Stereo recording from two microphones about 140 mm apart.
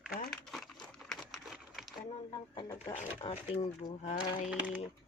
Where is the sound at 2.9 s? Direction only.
50° left (ahead or behind).